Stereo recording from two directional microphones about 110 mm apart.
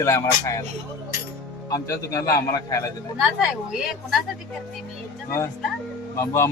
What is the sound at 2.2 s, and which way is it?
Speech, 30° left (ahead or behind).